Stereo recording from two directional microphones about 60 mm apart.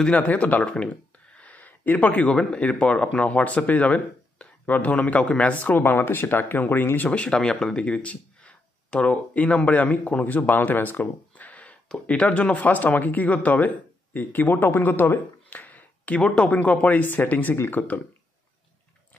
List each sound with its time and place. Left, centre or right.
0.0 s speech: centre
0.3 s speech: left
0.7 s a sound: left
2.3 s speech: centre; by 7.1 s left
7.1 s speech: centre